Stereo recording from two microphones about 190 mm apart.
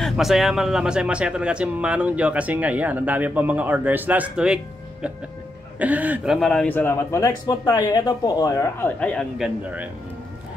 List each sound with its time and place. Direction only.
0.0 s speech: centre (ahead or behind)
5.8 s speech: 10° right (ahead or behind); by 9.2 s 10° left (ahead or behind)
9.4 s speech: 5° right (ahead or behind)